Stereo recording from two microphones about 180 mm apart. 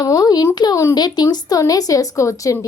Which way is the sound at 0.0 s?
20° left (ahead or behind).